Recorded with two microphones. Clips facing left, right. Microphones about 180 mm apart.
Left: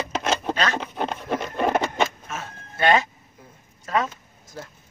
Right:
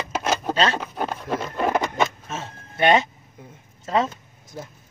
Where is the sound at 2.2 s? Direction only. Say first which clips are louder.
Right 2 dB; 25° right (ahead or behind).